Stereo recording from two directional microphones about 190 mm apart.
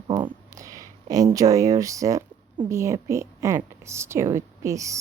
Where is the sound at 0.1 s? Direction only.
20° right (ahead or behind).